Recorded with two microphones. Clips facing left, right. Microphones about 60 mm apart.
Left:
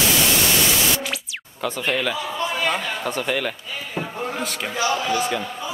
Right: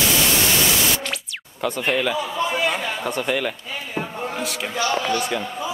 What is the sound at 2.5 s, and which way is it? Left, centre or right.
A man's voice, centre.